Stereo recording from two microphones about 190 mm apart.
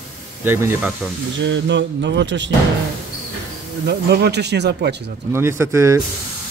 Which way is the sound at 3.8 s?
60° right (ahead or behind).